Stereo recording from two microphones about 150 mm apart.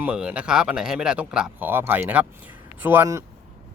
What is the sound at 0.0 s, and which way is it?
Speech, 10° right (ahead or behind).